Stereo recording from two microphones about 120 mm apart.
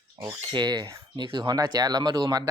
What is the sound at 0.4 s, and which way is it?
Speech, 40° right (ahead or behind).